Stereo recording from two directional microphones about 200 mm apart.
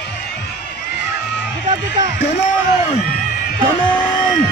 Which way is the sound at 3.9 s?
20° left (ahead or behind).